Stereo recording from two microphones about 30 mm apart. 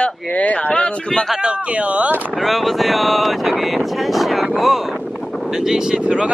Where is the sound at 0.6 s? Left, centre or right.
Left.